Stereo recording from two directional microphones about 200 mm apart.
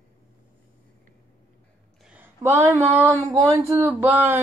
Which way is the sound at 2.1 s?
10° right (ahead or behind).